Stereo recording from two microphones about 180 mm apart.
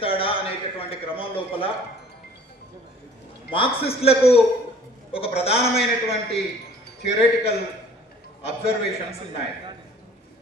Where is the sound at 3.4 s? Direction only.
30° left (ahead or behind).